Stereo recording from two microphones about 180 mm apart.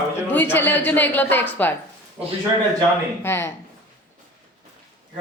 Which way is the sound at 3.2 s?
15° left (ahead or behind).